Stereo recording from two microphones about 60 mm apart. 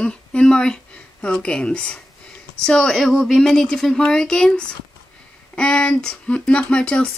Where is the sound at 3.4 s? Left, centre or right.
Centre.